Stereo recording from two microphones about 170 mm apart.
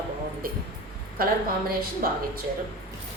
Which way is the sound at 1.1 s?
60° right (ahead or behind).